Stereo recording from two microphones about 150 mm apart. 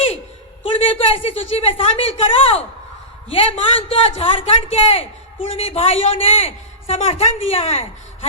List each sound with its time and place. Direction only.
0.6 s a woman's voice: 35° left (ahead or behind)